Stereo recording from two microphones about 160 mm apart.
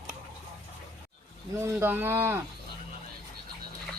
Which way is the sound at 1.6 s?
15° right (ahead or behind).